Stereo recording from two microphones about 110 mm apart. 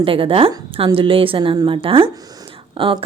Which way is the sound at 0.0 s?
55° right (ahead or behind).